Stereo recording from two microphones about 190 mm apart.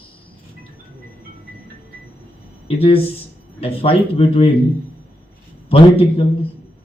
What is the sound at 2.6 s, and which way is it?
A man's voice, 30° left (ahead or behind).